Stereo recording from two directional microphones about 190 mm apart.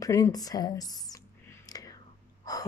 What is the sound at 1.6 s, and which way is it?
Whispering, 20° left (ahead or behind).